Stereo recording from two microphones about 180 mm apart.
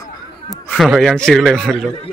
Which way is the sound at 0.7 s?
Centre (ahead or behind).